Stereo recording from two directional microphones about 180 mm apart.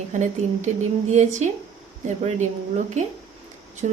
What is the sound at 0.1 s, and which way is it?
Speech, 45° right (ahead or behind).